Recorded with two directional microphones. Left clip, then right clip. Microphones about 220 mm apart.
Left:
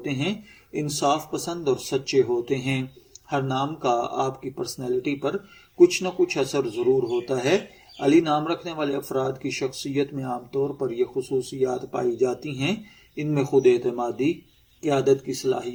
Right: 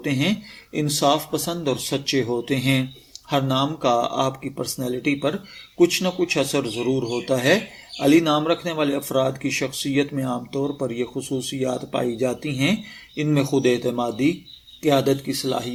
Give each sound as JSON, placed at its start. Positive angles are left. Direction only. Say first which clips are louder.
{"t": 0.0, "sound": "speech", "louder": "right 5 dB", "side_deg": -35}